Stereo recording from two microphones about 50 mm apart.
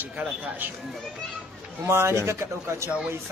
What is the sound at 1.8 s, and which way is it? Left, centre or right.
Speech, right.